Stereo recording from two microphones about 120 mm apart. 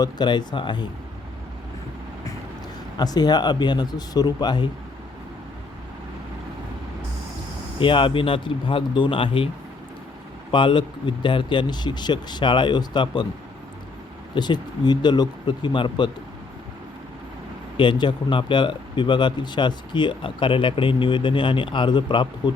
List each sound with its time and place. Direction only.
0.0 s speech: 40° left (ahead or behind)
3.0 s speech: 35° left (ahead or behind)
7.8 s speech: 45° left (ahead or behind)
10.5 s speech: 45° left (ahead or behind)
14.3 s speech: 40° left (ahead or behind)
17.7 s speech: 40° left (ahead or behind)